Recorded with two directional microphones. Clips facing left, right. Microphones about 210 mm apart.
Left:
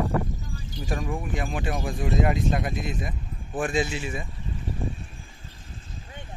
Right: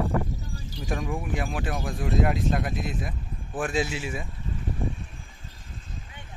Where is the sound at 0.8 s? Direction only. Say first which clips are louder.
Even; centre (ahead or behind).